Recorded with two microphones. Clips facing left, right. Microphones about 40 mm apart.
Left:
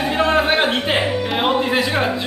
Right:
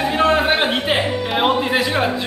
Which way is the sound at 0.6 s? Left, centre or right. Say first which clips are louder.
Even; centre.